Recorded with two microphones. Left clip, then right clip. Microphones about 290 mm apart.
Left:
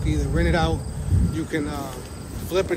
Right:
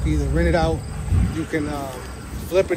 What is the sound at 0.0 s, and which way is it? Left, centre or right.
Speech, centre.